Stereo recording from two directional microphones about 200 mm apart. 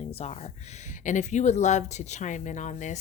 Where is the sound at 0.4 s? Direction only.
35° left (ahead or behind).